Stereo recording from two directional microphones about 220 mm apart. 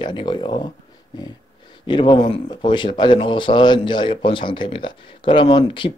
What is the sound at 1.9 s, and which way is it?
Speech, 20° left (ahead or behind).